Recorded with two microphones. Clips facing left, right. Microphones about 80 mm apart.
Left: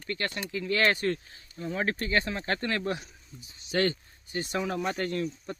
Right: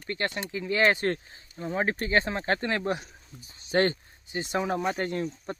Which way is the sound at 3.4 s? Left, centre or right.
Right.